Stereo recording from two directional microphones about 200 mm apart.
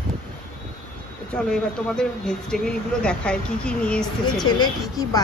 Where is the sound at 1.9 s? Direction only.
5° left (ahead or behind).